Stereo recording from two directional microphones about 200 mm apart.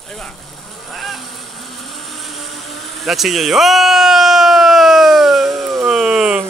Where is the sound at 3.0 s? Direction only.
Centre (ahead or behind).